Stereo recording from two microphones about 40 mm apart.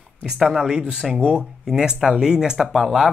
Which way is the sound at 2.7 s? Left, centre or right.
Centre.